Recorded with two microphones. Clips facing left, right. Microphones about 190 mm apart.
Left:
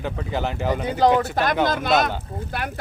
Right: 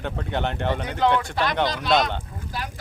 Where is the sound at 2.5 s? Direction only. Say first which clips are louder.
Left 3 dB; 60° left (ahead or behind).